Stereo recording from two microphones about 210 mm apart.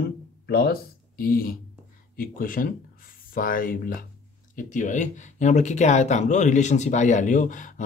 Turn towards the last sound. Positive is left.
turn(degrees=35)  # may be behind; listen again after turning